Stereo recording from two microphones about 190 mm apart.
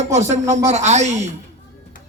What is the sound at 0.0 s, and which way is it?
A man's voice, 35° right (ahead or behind).